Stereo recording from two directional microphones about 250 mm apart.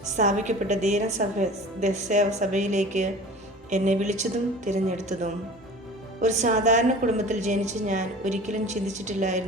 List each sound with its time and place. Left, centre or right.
0.2 s a woman's voice: right